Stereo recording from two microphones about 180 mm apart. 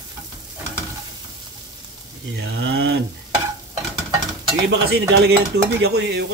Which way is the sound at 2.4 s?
75° right (ahead or behind).